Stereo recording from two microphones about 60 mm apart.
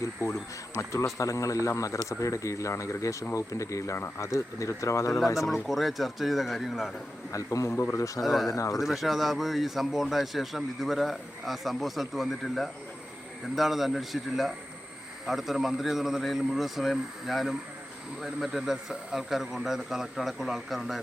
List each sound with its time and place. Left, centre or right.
0.2 s speech: left
5.6 s a man's voice: centre
7.3 s speech: left
8.2 s a man's voice: centre
8.4 s speech: left
8.7 s a man's voice: centre